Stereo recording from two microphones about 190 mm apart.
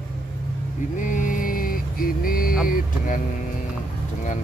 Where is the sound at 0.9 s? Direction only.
45° left (ahead or behind).